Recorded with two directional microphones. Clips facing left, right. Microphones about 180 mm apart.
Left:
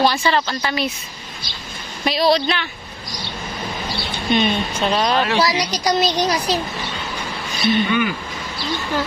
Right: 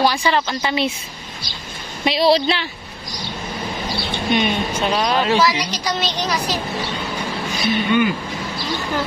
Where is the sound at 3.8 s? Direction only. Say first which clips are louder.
Right 1 dB; 15° right (ahead or behind).